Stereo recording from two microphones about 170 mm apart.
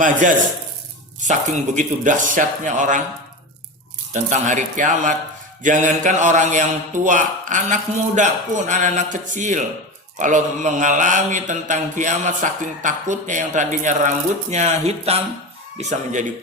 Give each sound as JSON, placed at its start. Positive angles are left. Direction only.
{"t": 0.0, "sound": "a man's voice", "side_deg": -50}
{"t": 4.1, "sound": "a man's voice", "side_deg": -45}